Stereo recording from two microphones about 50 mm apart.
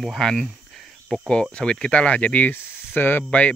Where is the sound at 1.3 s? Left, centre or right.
Centre.